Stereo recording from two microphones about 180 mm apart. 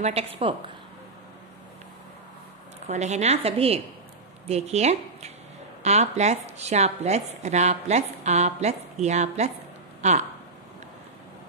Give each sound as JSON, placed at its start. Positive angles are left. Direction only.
{"t": 0.0, "sound": "speech", "side_deg": -35}
{"t": 2.9, "sound": "speech", "side_deg": -40}